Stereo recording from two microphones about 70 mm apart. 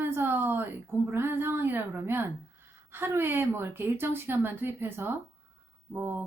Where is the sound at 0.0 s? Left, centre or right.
Right.